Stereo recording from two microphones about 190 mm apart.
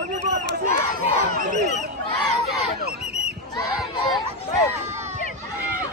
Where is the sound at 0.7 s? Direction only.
50° right (ahead or behind).